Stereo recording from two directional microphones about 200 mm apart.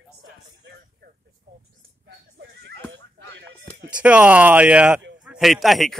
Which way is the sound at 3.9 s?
5° right (ahead or behind).